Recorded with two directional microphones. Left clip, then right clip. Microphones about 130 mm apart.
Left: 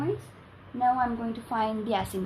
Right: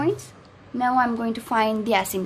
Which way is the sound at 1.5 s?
40° right (ahead or behind).